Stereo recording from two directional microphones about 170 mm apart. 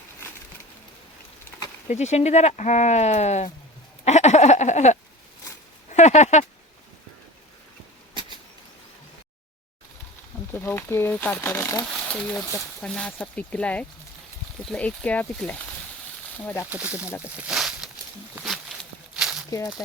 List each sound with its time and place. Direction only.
1.9 s speech: 40° left (ahead or behind)
4.0 s a sound: 40° left (ahead or behind)
5.9 s speech: 45° left (ahead or behind)
10.5 s speech: 15° left (ahead or behind)
11.9 s speech: 5° left (ahead or behind)
16.6 s speech: 10° right (ahead or behind)
17.1 s speech: 15° left (ahead or behind)
17.5 s a sound: 5° right (ahead or behind)
18.3 s walk: centre (ahead or behind)
19.5 s speech: 20° left (ahead or behind)